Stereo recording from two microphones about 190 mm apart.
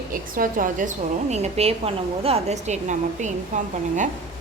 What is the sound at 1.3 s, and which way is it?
A woman's voice, 35° right (ahead or behind).